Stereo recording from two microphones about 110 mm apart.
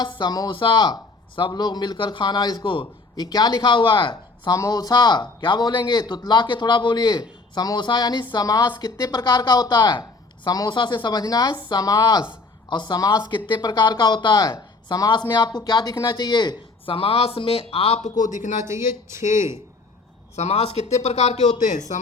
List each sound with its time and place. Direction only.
0.0 s a man's voice: 40° left (ahead or behind)
4.5 s speech: 30° left (ahead or behind)
16.8 s speech: 55° left (ahead or behind)
18.6 s speech: 25° right (ahead or behind)
20.3 s speech: 75° left (ahead or behind); by 21.9 s 90° left